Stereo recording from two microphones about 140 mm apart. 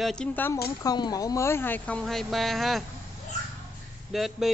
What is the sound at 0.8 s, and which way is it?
Speech, 30° left (ahead or behind).